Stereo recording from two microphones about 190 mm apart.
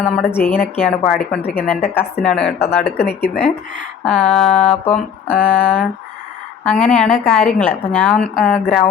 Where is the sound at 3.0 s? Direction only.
60° left (ahead or behind).